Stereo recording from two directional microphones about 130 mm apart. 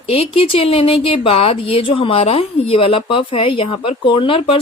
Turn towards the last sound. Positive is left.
turn(degrees=45)  # may be behind; listen again after turning